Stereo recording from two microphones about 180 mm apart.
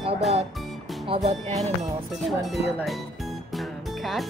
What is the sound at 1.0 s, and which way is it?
Speech, 35° right (ahead or behind).